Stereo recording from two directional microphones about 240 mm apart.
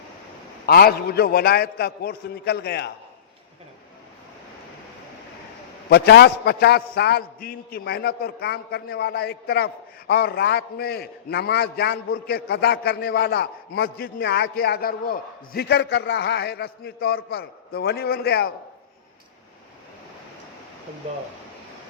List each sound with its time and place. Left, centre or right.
0.7 s a man's voice: left
5.9 s a man's voice: left